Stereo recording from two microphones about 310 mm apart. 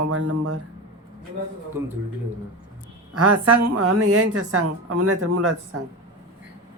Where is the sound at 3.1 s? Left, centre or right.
Right.